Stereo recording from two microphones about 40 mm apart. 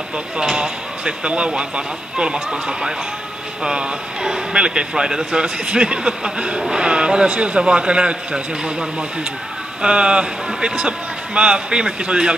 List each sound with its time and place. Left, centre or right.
0.6 s speech: right